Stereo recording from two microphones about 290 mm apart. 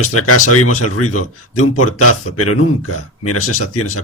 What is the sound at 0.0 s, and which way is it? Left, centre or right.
Speech, left.